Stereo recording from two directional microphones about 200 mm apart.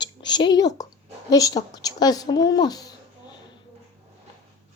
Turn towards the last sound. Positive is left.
turn(degrees=20)  # may be behind; listen again after turning